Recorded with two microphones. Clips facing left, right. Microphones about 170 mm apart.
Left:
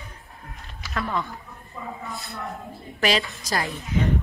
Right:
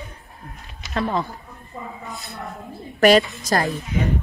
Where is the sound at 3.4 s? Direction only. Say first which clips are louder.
Right 6 dB; 50° right (ahead or behind).